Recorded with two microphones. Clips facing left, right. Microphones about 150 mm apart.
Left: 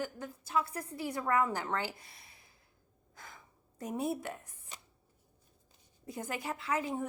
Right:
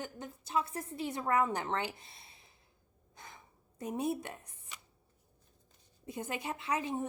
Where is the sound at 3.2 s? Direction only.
25° right (ahead or behind).